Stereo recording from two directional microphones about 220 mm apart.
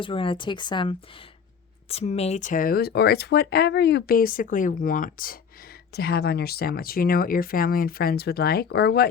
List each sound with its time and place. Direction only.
0.0 s speech: 25° left (ahead or behind); by 9.0 s 50° left (ahead or behind)